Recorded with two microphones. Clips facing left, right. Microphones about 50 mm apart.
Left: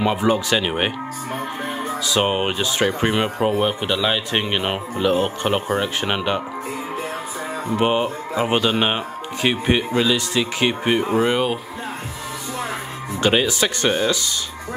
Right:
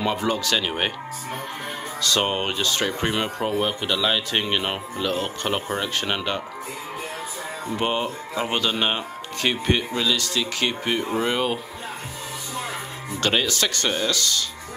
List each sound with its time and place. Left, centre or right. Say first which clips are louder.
0.0 s speech: left 5 dB; centre
7.7 s speech: left 5 dB; centre
11.3 s speech: left 3 dB; centre
13.2 s speech: left 4 dB; centre